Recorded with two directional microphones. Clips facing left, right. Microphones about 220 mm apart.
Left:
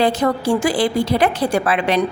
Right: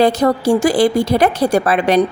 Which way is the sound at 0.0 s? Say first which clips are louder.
Right 4 dB; 40° right (ahead or behind).